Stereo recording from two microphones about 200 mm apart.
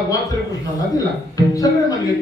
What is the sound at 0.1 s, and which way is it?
Speech, 15° left (ahead or behind).